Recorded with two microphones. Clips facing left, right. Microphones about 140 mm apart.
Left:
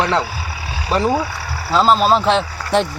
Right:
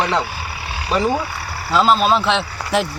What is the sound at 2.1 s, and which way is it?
Speech, 35° left (ahead or behind).